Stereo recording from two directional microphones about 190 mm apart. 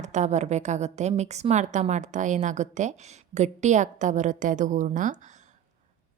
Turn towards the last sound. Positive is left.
turn(degrees=-40)  # may be behind; listen again after turning